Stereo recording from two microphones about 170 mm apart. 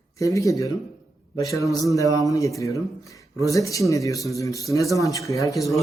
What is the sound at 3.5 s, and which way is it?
Speech, 20° left (ahead or behind).